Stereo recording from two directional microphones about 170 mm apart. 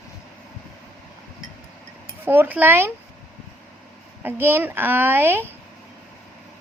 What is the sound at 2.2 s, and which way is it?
Speech, 10° right (ahead or behind).